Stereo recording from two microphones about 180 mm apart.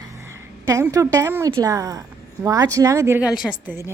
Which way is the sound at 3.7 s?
15° right (ahead or behind).